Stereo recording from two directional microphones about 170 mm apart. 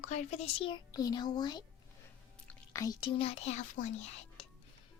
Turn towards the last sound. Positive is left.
turn(degrees=45)  # may be behind; listen again after turning